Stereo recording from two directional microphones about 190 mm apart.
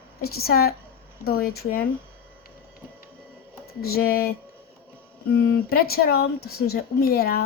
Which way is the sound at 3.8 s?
50° left (ahead or behind).